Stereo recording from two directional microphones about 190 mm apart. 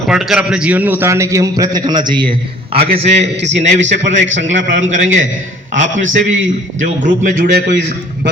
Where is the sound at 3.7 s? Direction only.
40° right (ahead or behind).